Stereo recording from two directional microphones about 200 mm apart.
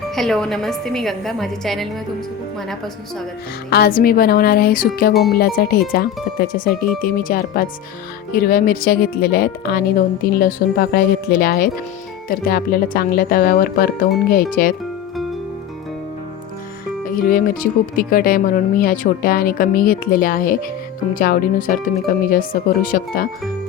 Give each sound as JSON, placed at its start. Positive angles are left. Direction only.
{"t": 0.2, "sound": "a woman's voice", "side_deg": 0}
{"t": 3.7, "sound": "speech", "side_deg": 50}
{"t": 17.1, "sound": "speech", "side_deg": 45}